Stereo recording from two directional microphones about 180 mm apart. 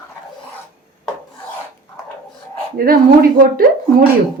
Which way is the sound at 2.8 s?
50° right (ahead or behind).